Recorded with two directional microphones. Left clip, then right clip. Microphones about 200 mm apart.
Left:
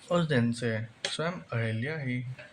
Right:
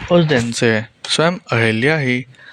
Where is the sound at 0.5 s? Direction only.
50° right (ahead or behind).